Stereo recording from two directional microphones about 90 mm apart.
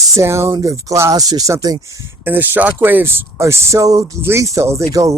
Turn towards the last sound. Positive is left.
turn(degrees=-35)  # may be behind; listen again after turning